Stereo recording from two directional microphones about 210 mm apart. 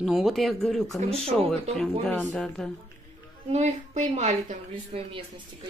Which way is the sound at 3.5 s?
30° right (ahead or behind).